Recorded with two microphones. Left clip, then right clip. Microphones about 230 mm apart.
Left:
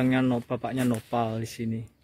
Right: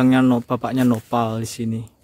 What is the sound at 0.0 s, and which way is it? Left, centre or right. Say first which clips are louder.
Speech: right 8 dB; centre.